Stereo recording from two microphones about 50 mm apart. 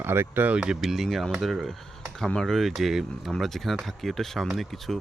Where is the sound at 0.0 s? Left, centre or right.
Right.